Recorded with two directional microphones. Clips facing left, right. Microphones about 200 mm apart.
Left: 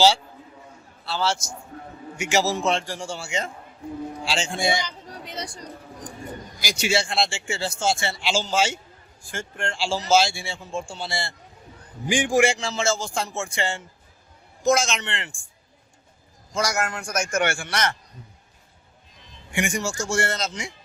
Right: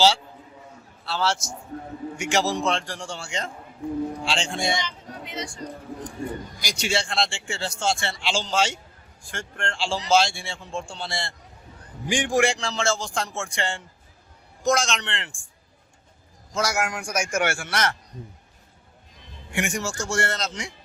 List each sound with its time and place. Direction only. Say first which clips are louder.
1.0 s speech: even; centre (ahead or behind)
4.8 s a sound: even; 35° left (ahead or behind)
6.6 s speech: left 4 dB; 5° left (ahead or behind)
16.6 s a man's voice: even; 5° right (ahead or behind)
19.5 s speech: left 2 dB; centre (ahead or behind)